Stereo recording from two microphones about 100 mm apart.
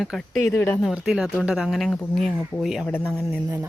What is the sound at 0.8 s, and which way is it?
Speech, 5° right (ahead or behind).